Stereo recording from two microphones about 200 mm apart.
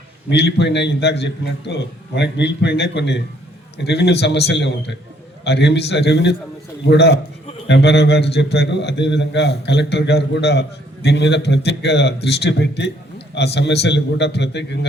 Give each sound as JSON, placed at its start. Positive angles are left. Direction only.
{"t": 0.3, "sound": "a man's voice", "side_deg": 60}